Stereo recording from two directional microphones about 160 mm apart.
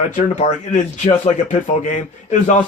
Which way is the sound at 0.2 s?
50° left (ahead or behind).